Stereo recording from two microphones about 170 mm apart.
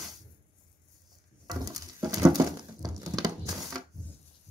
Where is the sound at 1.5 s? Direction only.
20° right (ahead or behind).